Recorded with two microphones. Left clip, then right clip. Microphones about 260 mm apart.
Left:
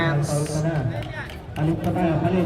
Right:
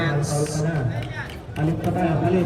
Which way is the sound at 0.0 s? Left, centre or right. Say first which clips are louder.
Even; left.